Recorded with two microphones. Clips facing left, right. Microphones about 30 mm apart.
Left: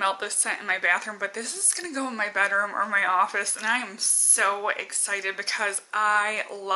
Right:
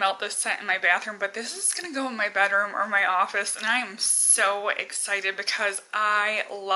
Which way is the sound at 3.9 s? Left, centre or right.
Right.